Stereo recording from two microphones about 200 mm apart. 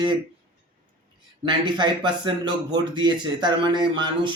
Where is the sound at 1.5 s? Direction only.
25° right (ahead or behind).